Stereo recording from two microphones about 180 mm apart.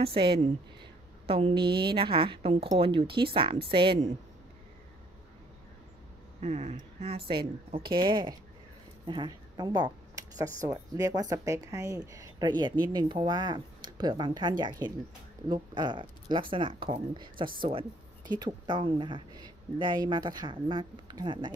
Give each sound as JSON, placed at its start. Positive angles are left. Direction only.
{"t": 0.0, "sound": "speech", "side_deg": -30}
{"t": 6.4, "sound": "speech", "side_deg": -40}
{"t": 9.0, "sound": "a sound", "side_deg": -25}
{"t": 10.7, "sound": "speech", "side_deg": -20}